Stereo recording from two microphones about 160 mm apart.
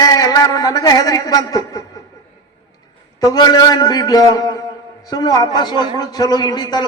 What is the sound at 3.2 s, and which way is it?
A man's voice, 25° left (ahead or behind).